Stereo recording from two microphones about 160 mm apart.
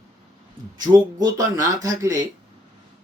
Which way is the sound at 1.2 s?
20° right (ahead or behind).